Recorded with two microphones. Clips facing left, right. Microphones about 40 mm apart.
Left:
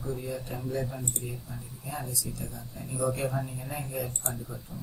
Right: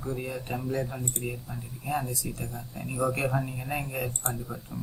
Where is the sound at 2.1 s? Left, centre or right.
Right.